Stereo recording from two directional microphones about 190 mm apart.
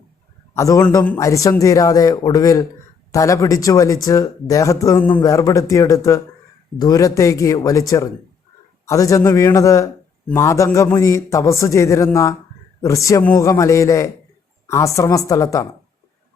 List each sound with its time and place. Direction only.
0.5 s a man's voice: 15° left (ahead or behind)